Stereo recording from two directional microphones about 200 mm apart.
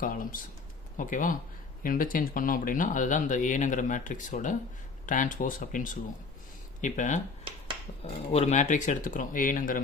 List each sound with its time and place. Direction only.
0.0 s speech: 45° left (ahead or behind)
8.3 s speech: 35° left (ahead or behind)